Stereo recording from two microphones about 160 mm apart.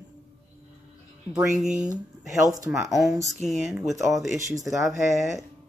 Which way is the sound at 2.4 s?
20° right (ahead or behind).